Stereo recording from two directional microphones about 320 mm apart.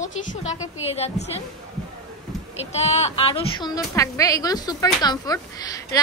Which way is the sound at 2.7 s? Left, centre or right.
Centre.